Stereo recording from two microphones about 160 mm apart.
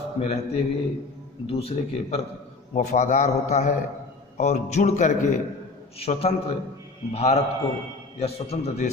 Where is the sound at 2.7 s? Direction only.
50° left (ahead or behind).